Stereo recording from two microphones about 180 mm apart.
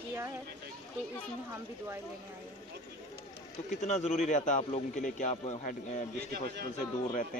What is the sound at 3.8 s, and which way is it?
A man's voice, 40° left (ahead or behind).